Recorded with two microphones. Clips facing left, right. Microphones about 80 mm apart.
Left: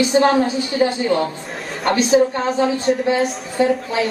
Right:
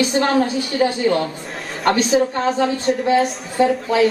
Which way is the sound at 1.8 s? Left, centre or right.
Centre.